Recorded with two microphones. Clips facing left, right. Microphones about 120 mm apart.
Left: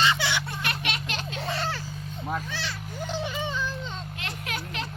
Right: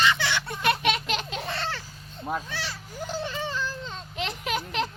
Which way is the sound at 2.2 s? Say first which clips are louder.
Right 1 dB; 10° right (ahead or behind).